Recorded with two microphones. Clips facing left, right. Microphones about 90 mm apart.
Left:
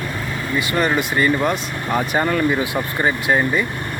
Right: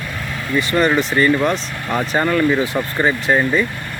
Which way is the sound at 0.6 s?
10° left (ahead or behind).